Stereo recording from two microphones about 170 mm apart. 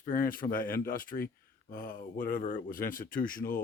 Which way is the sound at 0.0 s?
55° left (ahead or behind).